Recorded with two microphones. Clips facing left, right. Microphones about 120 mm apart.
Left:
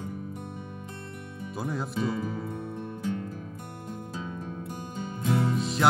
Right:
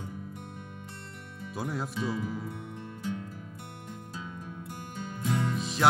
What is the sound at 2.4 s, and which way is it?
Music, 50° left (ahead or behind).